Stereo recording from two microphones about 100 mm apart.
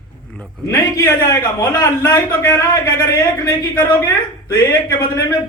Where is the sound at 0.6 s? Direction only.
30° left (ahead or behind).